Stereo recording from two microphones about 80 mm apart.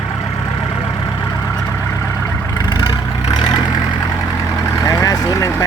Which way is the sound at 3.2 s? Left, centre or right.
Left.